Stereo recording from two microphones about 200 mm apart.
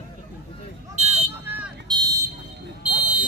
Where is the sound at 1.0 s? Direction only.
35° right (ahead or behind).